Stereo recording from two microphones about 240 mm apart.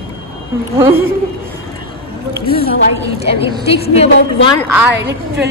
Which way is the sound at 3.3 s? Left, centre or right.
Left.